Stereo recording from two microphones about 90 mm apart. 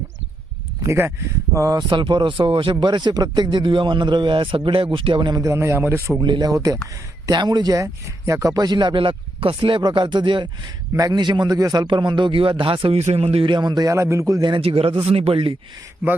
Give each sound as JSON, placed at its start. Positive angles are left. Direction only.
{"t": 0.9, "sound": "speech", "side_deg": -25}
{"t": 1.5, "sound": "a man's voice", "side_deg": -35}
{"t": 1.9, "sound": "speech", "side_deg": -60}
{"t": 5.3, "sound": "a man's voice", "side_deg": -35}
{"t": 6.2, "sound": "speech", "side_deg": -60}
{"t": 6.5, "sound": "a man's voice", "side_deg": -40}
{"t": 7.3, "sound": "speech", "side_deg": -55}
{"t": 9.8, "sound": "speech", "side_deg": -60}
{"t": 10.9, "sound": "a man's voice", "side_deg": -40}
{"t": 11.2, "sound": "speech", "side_deg": -55}
{"t": 11.5, "sound": "speech", "side_deg": -45}
{"t": 13.9, "sound": "a man's voice", "side_deg": -35}
{"t": 14.4, "sound": "speech", "side_deg": -75}